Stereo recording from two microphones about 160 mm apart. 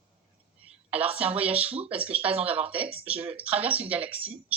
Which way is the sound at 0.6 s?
10° right (ahead or behind).